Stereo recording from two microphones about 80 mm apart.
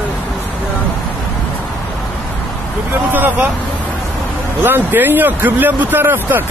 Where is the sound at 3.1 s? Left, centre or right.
Right.